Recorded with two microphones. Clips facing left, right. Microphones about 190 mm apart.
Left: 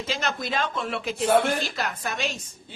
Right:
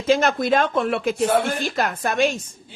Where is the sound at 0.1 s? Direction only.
50° right (ahead or behind).